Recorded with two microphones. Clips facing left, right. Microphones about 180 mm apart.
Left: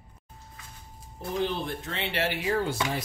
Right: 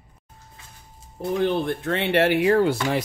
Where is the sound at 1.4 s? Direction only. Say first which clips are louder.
Right 7 dB; 60° right (ahead or behind).